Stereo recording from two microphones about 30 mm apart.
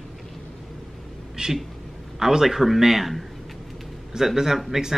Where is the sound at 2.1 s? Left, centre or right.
Centre.